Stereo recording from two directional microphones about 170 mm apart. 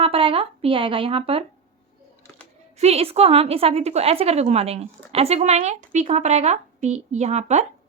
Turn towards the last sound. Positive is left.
turn(degrees=-40)  # may be behind; listen again after turning